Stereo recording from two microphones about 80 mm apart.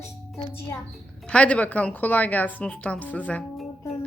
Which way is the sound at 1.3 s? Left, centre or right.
Centre.